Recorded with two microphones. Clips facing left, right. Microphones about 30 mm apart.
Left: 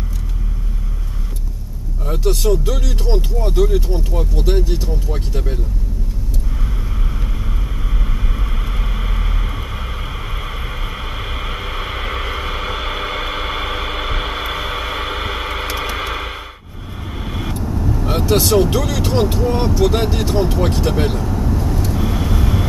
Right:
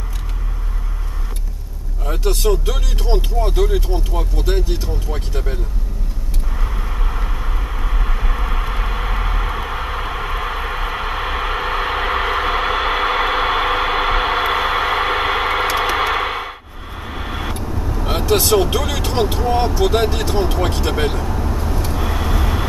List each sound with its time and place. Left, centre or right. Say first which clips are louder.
2.0 s speech: left 1 dB; centre
6.6 s vehicle: right 1 dB; right
16.0 s breathing: right 6 dB; right
17.0 s vehicle: right 1 dB; centre
18.7 s speech: left 2 dB; centre
20.8 s vehicle: left 1 dB; centre